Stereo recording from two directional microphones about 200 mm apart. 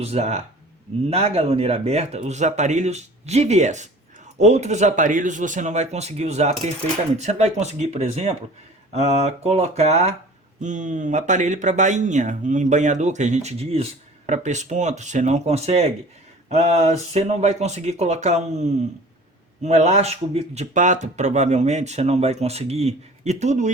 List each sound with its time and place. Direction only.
0.0 s speech: 35° right (ahead or behind)